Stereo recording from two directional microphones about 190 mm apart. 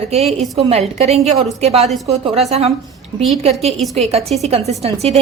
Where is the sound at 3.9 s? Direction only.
35° right (ahead or behind).